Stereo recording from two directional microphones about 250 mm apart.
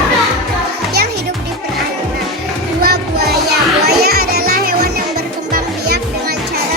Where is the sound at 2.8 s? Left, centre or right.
Right.